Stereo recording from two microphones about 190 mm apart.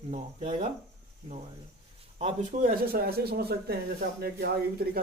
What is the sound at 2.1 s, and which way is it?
Speech, 40° right (ahead or behind).